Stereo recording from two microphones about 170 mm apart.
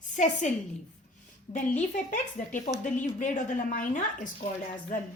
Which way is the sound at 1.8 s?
45° left (ahead or behind).